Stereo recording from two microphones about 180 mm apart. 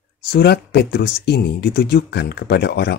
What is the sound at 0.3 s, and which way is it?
Speech, 65° left (ahead or behind).